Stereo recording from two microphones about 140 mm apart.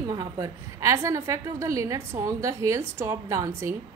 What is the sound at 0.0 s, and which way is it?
A woman's voice, 25° right (ahead or behind).